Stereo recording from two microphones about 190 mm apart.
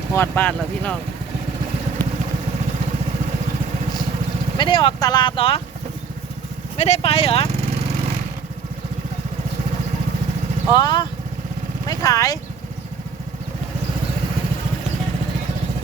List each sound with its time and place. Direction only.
0.1 s speech: 10° left (ahead or behind)
4.5 s speech: 25° left (ahead or behind)
6.7 s speech: 35° left (ahead or behind)
10.7 s speech: 20° left (ahead or behind)